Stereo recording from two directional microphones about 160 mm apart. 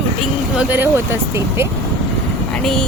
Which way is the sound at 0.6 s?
10° right (ahead or behind).